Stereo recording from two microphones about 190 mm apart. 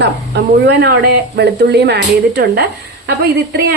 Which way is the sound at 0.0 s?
60° right (ahead or behind).